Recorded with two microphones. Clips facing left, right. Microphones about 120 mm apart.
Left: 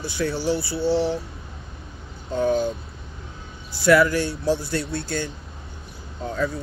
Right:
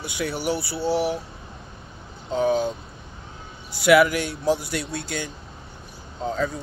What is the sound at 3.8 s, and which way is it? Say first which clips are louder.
Speech: even; 15° right (ahead or behind).